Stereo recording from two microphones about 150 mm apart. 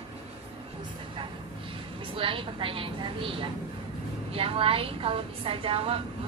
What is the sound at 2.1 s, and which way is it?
Speech, 35° right (ahead or behind).